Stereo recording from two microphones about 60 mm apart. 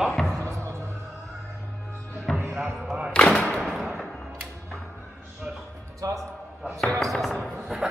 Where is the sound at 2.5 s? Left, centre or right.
Centre.